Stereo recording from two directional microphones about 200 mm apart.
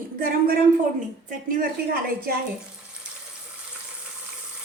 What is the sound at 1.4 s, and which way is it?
Speech, 45° right (ahead or behind).